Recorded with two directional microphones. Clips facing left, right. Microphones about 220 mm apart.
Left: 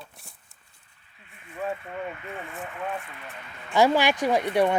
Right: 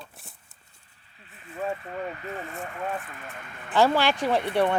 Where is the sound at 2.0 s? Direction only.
35° right (ahead or behind).